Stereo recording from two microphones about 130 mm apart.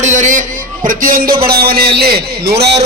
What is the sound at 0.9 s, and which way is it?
Speech, 90° right.